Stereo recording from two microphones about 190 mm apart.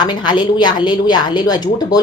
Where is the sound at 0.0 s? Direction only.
25° left (ahead or behind).